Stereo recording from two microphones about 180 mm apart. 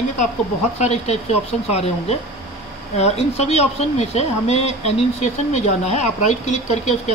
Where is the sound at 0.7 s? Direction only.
35° left (ahead or behind).